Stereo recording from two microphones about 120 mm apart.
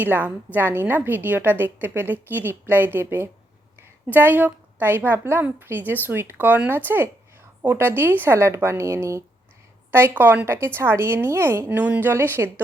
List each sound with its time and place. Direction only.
0.0 s a woman's voice: 15° right (ahead or behind)